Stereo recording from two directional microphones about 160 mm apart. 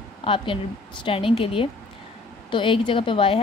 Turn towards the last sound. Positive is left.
turn(degrees=35)  # may be behind; listen again after turning